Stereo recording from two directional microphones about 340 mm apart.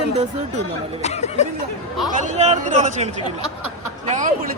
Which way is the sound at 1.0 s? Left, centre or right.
Centre.